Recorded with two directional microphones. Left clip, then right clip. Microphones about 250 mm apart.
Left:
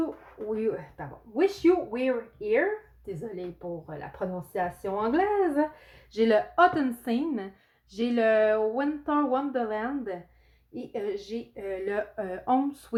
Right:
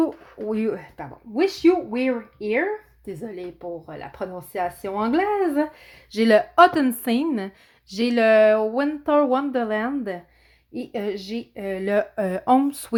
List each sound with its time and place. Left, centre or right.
0.0 s speech: right
3.8 s speech: right